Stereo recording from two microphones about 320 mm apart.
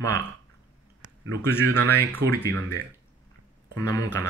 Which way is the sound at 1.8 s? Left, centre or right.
Centre.